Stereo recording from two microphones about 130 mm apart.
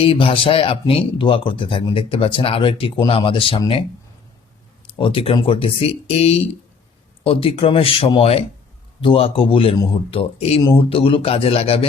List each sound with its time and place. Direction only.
0.0 s speech: 45° left (ahead or behind)
4.9 s speech: 45° left (ahead or behind)